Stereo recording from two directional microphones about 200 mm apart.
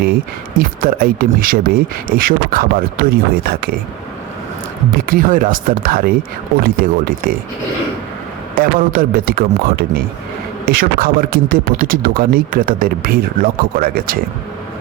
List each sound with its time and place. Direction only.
0.0 s speech: 45° right (ahead or behind)
5.0 s speech: 45° right (ahead or behind)
8.6 s speech: 45° right (ahead or behind)